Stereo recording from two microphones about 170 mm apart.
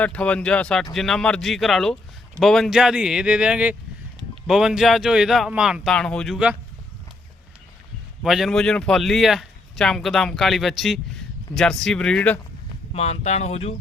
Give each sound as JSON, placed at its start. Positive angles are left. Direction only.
{"t": 0.0, "sound": "a man's voice", "side_deg": 5}
{"t": 8.2, "sound": "a man's voice", "side_deg": 0}
{"t": 12.9, "sound": "speech", "side_deg": 40}